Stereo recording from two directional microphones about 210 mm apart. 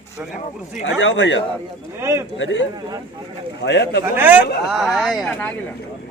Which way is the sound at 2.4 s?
60° left (ahead or behind).